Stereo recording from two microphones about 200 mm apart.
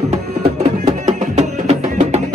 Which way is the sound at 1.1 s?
35° right (ahead or behind).